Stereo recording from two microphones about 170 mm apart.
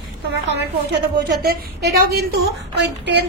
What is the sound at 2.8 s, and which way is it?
Speech, 85° right.